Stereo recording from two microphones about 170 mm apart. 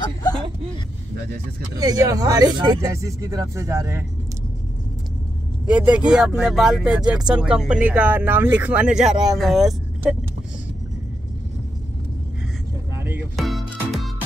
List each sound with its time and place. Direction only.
1.8 s speech: 20° right (ahead or behind)
5.7 s speech: 5° right (ahead or behind)
12.9 s music: 15° right (ahead or behind)
13.4 s music: centre (ahead or behind)